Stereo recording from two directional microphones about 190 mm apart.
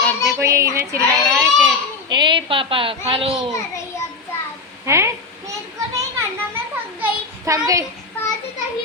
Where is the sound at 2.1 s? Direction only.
25° right (ahead or behind).